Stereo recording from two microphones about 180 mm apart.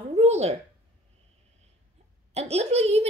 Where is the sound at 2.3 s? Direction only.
35° right (ahead or behind).